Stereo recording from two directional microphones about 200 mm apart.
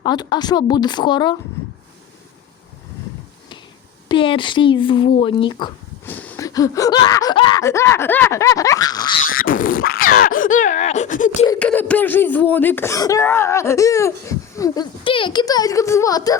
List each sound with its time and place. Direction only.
0.0 s speech: 20° left (ahead or behind)
4.1 s speech: 25° left (ahead or behind)
6.1 s speech: 10° left (ahead or behind)
9.3 s a sound: 45° left (ahead or behind)
11.6 s speech: 5° left (ahead or behind)